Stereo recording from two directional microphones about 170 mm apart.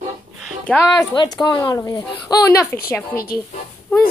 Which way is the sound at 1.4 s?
25° left (ahead or behind).